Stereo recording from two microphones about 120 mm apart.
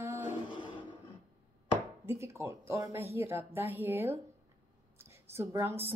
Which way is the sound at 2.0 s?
20° right (ahead or behind).